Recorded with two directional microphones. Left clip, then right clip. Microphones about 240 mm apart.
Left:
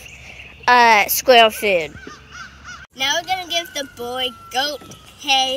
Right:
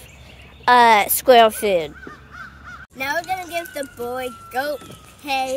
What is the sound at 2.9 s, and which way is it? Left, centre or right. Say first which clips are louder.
Speech: left 3 dB; centre.